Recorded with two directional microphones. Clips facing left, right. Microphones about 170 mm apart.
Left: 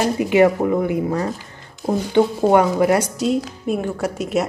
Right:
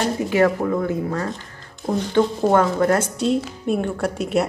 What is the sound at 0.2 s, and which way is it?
A woman's voice, 20° left (ahead or behind).